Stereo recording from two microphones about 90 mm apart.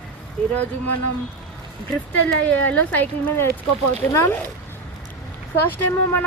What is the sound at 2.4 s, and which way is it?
Speech, 20° left (ahead or behind).